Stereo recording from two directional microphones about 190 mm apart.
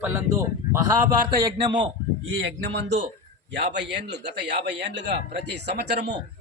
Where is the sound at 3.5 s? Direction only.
65° right (ahead or behind).